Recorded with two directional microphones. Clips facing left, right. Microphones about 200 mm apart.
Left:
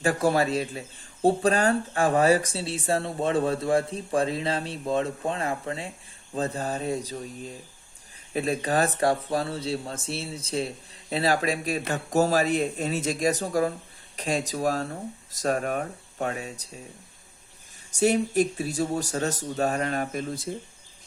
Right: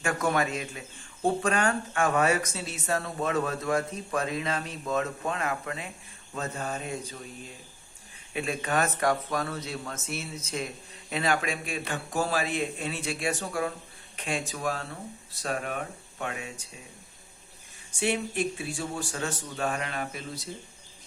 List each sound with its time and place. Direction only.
0.0 s speech: 35° left (ahead or behind)
17.9 s speech: 40° left (ahead or behind)